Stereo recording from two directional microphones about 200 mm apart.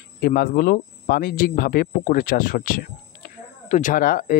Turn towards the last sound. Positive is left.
turn(degrees=45)  # may be behind; listen again after turning